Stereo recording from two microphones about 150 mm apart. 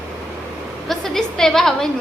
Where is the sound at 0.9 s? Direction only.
5° left (ahead or behind).